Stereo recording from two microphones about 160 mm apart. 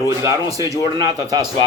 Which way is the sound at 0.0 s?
20° right (ahead or behind).